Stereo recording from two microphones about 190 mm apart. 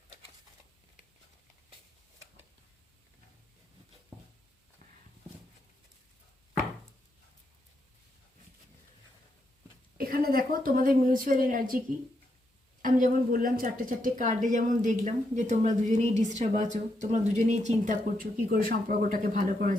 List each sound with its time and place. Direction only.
10.0 s a sound: 50° right (ahead or behind)
11.0 s a woman's voice: 45° right (ahead or behind)
12.8 s a woman's voice: 45° right (ahead or behind)